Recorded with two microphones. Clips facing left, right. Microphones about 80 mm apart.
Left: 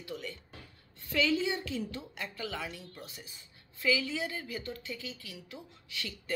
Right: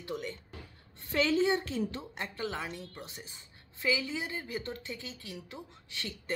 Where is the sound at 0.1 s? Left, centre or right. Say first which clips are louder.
Right 4 dB; right.